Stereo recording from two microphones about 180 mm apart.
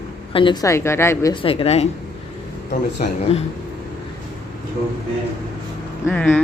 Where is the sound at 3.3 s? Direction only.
35° left (ahead or behind).